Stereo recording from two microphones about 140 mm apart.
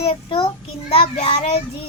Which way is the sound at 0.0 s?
45° left (ahead or behind).